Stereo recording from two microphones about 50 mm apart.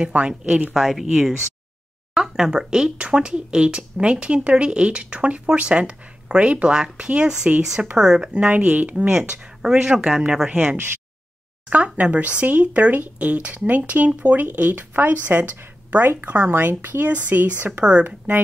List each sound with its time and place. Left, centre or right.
0.0 s a woman's voice: right
0.7 s a woman's voice: centre
8.5 s speech: right
9.3 s speech: centre
10.5 s a woman's voice: right
18.0 s speech: right